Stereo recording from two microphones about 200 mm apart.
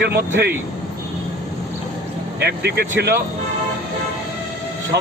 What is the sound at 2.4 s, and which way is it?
Speech, 55° right (ahead or behind).